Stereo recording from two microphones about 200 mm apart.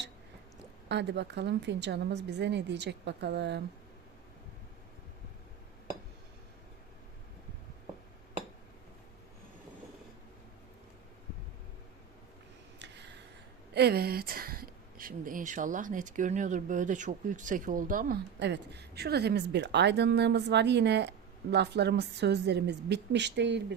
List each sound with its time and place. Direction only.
0.9 s a woman's voice: 60° right (ahead or behind)
12.8 s a sound: 60° right (ahead or behind)
13.7 s speech: 55° right (ahead or behind)
18.3 s a woman's voice: 60° right (ahead or behind)